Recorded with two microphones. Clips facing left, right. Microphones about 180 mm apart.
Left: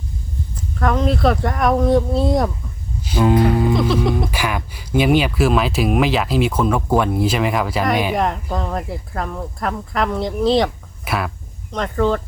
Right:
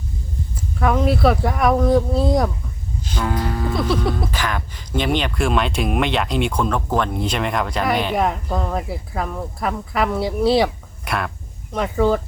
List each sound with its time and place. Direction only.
0.5 s speech: 5° right (ahead or behind)
3.2 s speech: 25° left (ahead or behind)
4.3 s speech: 10° left (ahead or behind)
11.7 s speech: 10° right (ahead or behind)